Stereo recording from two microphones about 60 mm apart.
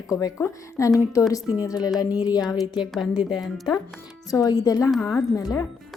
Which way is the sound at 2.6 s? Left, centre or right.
Centre.